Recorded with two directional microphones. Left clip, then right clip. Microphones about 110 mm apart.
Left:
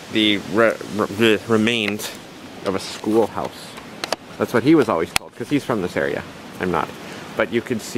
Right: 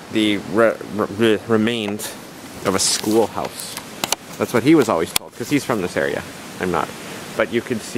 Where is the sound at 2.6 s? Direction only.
50° right (ahead or behind).